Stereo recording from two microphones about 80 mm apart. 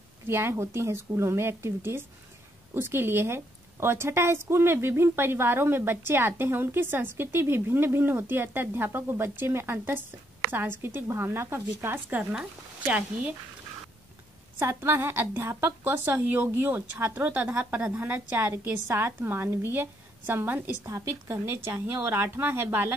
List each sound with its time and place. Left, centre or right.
0.3 s a woman's voice: right
14.6 s a woman's voice: right
20.8 s a woman's voice: right